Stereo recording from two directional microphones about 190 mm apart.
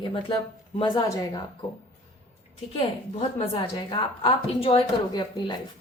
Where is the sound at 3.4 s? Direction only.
25° left (ahead or behind).